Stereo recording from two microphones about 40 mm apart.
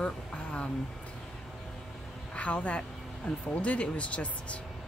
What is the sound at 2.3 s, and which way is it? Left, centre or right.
Speech, left.